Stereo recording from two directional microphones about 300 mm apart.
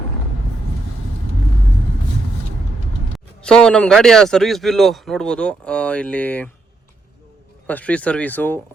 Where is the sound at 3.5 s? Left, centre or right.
Centre.